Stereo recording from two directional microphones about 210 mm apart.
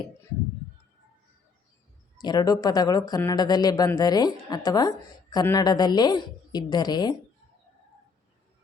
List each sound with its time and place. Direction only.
2.1 s speech: 20° left (ahead or behind)